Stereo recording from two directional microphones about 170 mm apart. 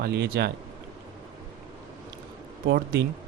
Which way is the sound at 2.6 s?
65° right (ahead or behind).